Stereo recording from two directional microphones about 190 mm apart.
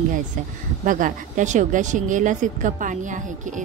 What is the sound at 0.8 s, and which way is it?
A woman's voice, 45° right (ahead or behind).